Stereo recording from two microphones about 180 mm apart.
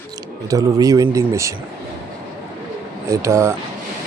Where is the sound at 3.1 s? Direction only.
15° right (ahead or behind).